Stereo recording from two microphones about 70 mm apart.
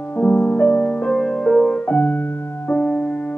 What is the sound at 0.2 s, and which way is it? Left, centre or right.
Music, centre.